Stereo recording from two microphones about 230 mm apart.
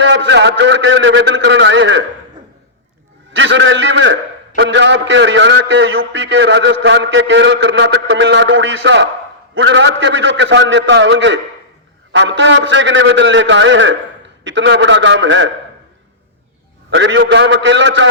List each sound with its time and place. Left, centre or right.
0.0 s a man's voice: right
3.3 s a man's voice: right
16.9 s a man's voice: right